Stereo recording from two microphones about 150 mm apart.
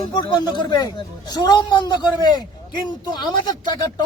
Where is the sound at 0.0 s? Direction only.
30° left (ahead or behind).